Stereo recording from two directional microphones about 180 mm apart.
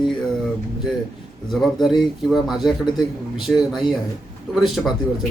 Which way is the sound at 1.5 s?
Centre (ahead or behind).